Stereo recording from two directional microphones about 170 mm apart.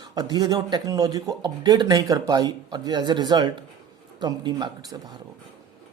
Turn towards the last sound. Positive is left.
turn(degrees=-25)  # may be behind; listen again after turning